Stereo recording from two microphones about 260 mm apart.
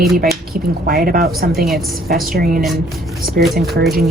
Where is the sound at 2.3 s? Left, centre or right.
Right.